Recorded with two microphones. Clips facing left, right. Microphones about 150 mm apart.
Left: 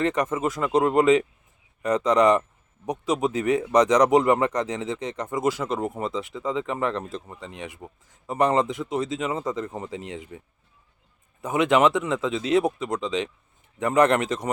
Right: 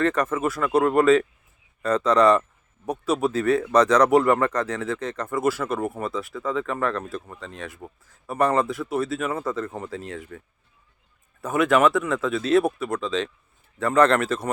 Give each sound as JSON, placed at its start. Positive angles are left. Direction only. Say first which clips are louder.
{"t": 0.0, "sound": "speech", "louder": "right 1 dB", "side_deg": 15}